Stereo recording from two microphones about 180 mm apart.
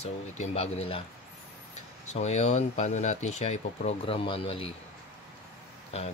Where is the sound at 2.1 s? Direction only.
40° left (ahead or behind).